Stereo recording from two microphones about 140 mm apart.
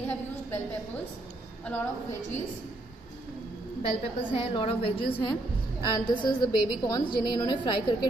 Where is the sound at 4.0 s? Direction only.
40° left (ahead or behind).